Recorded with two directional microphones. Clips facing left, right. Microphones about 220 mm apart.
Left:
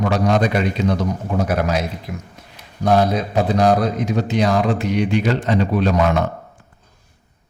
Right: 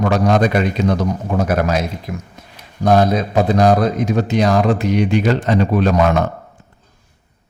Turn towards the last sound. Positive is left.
turn(degrees=-50)  # may be behind; listen again after turning